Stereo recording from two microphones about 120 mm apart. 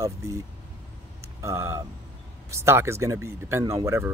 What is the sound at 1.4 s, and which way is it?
Speech, 25° right (ahead or behind).